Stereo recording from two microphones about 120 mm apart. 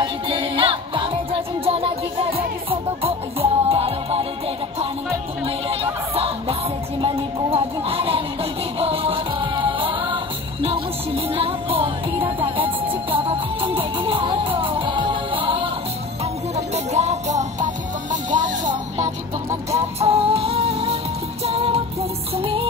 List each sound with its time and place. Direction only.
0.0 s music: 45° right (ahead or behind)
5.4 s music: 55° right (ahead or behind)
7.5 s music: 50° right (ahead or behind)
16.5 s music: 65° right (ahead or behind)
18.1 s music: 90° right
20.0 s music: 55° right (ahead or behind)